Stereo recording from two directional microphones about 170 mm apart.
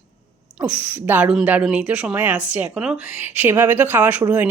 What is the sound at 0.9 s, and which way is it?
A woman's voice, 10° right (ahead or behind).